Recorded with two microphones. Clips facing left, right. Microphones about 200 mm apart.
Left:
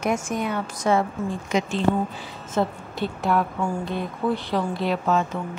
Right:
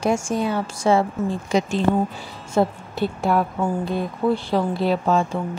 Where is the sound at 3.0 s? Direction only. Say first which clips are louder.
Right 4 dB; 40° right (ahead or behind).